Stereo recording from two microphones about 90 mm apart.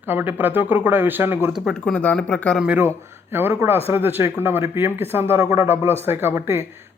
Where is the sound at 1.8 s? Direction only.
15° left (ahead or behind).